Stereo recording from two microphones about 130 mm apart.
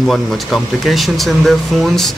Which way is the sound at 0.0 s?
Centre (ahead or behind).